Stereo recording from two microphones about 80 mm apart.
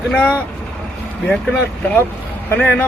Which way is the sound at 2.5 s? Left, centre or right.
Left.